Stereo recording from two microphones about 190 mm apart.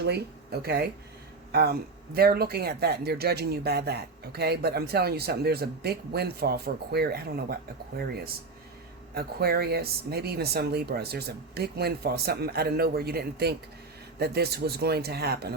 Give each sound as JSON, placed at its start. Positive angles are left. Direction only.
{"t": 0.0, "sound": "speech", "side_deg": -60}